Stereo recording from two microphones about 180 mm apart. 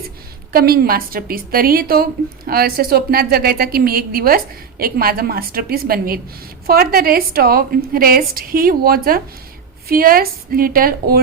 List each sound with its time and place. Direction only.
0.5 s a woman's voice: 55° right (ahead or behind)